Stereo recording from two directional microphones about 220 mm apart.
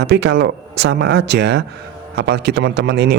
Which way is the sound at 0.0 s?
50° right (ahead or behind).